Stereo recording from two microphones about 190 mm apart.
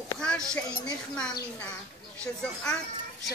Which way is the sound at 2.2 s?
5° left (ahead or behind).